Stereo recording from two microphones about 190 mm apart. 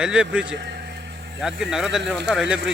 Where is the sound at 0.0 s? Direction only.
5° right (ahead or behind).